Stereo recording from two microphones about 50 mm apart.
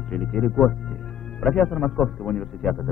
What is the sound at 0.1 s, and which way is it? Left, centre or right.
A man's voice, centre.